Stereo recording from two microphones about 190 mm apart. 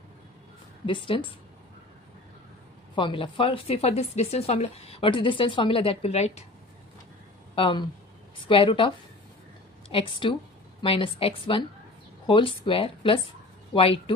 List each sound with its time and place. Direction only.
0.8 s speech: 30° left (ahead or behind)
3.0 s speech: 25° left (ahead or behind)
7.5 s speech: 25° left (ahead or behind)